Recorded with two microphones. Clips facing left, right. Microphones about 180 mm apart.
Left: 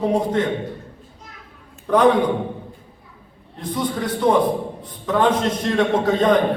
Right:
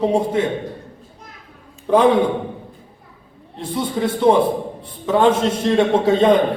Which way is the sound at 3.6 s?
25° right (ahead or behind).